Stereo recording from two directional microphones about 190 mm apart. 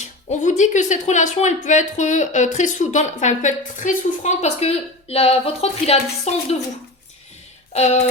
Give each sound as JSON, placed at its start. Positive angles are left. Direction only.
{"t": 0.0, "sound": "speech", "side_deg": 40}
{"t": 7.7, "sound": "speech", "side_deg": 35}